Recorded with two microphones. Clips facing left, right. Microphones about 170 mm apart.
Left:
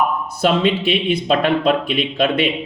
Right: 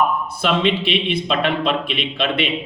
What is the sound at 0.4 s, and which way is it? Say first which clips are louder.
A man's voice: left 3 dB; 45° left (ahead or behind).